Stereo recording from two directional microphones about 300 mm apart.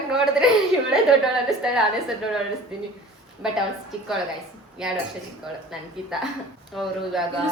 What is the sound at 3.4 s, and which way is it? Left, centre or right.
Speech, centre.